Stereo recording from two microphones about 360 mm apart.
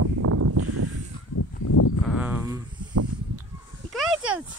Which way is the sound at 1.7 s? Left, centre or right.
Left.